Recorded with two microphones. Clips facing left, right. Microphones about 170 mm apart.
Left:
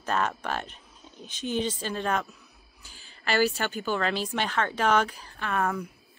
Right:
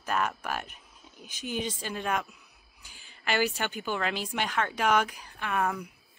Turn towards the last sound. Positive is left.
turn(degrees=-10)  # may be behind; listen again after turning